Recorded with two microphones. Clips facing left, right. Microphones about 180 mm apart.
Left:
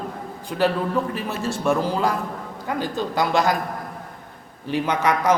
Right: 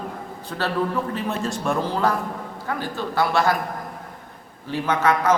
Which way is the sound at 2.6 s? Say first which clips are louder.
Left 3 dB; 15° left (ahead or behind).